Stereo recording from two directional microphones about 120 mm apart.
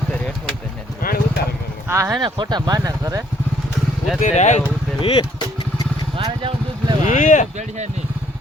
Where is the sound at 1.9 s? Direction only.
25° right (ahead or behind).